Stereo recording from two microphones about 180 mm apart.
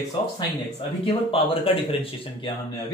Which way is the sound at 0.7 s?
30° left (ahead or behind).